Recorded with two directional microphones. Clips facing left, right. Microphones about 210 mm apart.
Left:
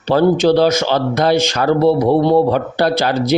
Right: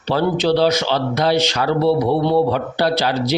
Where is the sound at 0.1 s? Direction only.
50° left (ahead or behind).